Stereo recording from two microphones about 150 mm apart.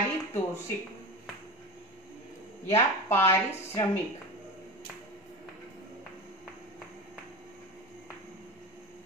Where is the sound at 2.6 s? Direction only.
15° left (ahead or behind).